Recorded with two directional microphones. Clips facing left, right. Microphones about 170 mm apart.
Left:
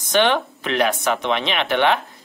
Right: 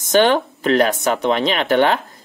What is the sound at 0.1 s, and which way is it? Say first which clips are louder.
Speech: right 4 dB; 45° right (ahead or behind).